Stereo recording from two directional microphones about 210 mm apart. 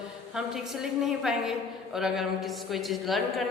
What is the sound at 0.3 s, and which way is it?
A woman's voice, 5° right (ahead or behind).